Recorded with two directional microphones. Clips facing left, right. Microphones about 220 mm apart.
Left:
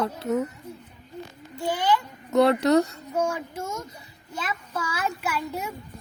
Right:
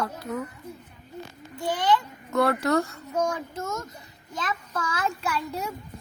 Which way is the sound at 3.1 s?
10° left (ahead or behind).